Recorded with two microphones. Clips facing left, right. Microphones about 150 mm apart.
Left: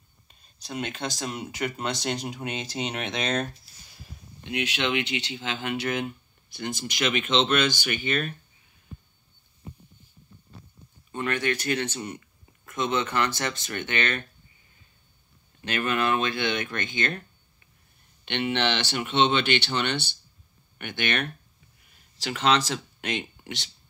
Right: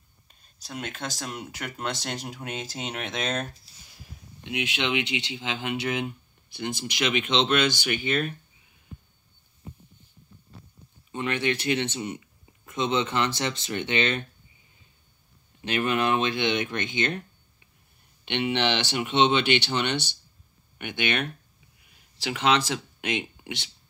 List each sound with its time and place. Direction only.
0.6 s speech: 5° right (ahead or behind)
11.1 s speech: 20° right (ahead or behind)
12.0 s speech: 10° right (ahead or behind)
12.6 s speech: 25° right (ahead or behind)
15.6 s speech: 20° right (ahead or behind)